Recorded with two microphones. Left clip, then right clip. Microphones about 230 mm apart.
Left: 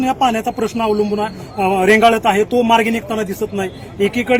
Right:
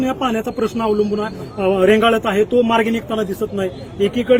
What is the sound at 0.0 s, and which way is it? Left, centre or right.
A man's voice, centre.